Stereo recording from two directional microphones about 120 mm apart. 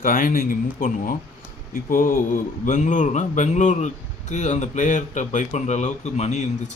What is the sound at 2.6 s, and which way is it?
A man's voice, 90° left.